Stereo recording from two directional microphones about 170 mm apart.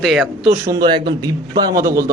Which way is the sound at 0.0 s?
Centre (ahead or behind).